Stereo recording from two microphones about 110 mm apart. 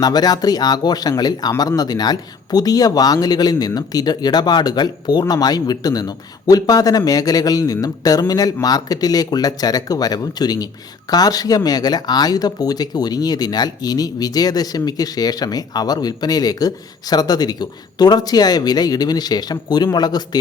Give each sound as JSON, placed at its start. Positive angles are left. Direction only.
{"t": 0.0, "sound": "speech", "side_deg": 40}